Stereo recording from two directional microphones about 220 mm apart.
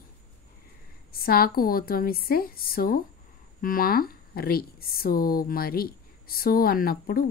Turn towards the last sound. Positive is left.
turn(degrees=40)  # may be behind; listen again after turning